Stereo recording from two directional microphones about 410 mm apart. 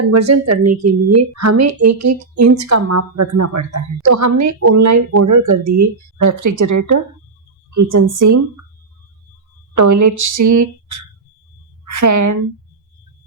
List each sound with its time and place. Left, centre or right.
0.0 s a woman's voice: right
0.7 s a woman's voice: centre
1.1 s a woman's voice: right
9.7 s speech: right
11.9 s a woman's voice: right